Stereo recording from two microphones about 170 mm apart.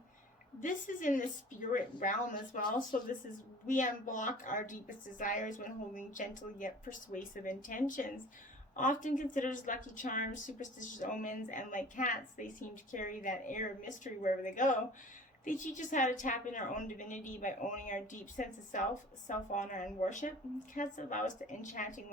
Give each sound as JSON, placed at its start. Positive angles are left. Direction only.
{"t": 0.6, "sound": "a woman's voice", "side_deg": 50}